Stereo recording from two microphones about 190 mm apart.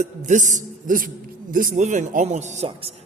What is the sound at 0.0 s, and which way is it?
Speech, 40° right (ahead or behind).